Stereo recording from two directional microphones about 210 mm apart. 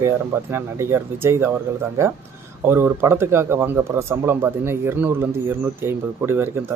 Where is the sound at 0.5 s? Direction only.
15° right (ahead or behind).